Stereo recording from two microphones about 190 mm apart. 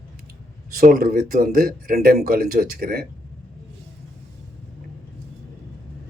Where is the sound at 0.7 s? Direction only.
50° right (ahead or behind).